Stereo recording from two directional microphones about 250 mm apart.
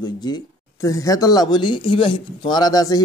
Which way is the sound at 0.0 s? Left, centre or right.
Centre.